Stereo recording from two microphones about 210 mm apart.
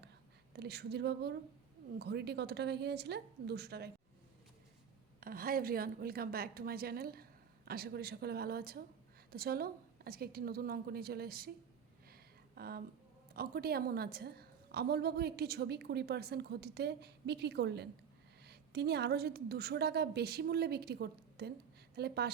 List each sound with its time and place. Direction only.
0.5 s a woman's voice: 50° right (ahead or behind)
5.2 s a woman's voice: 45° right (ahead or behind)
12.1 s a sound: 45° right (ahead or behind)
13.3 s a woman's voice: 50° right (ahead or behind)